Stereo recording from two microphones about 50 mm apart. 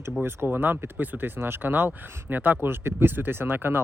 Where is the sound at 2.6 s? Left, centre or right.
Right.